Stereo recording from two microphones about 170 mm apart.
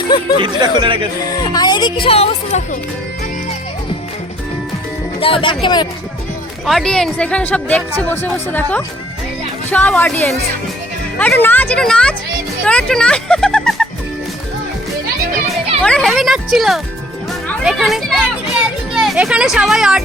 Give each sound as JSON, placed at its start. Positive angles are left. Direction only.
{"t": 0.3, "sound": "speech", "side_deg": -30}
{"t": 1.2, "sound": "speech", "side_deg": 20}
{"t": 5.2, "sound": "speech", "side_deg": 30}
{"t": 6.7, "sound": "speech", "side_deg": 5}
{"t": 15.8, "sound": "speech", "side_deg": 0}